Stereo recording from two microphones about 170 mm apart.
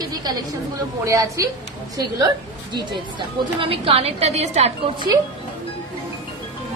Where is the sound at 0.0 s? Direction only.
25° right (ahead or behind).